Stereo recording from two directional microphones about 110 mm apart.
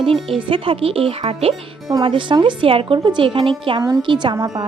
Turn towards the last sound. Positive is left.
turn(degrees=-35)  # may be behind; listen again after turning